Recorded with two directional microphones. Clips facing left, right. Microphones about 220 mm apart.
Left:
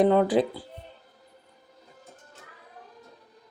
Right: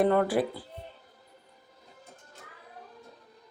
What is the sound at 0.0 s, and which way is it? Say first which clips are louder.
Speech: left 4 dB; 15° left (ahead or behind).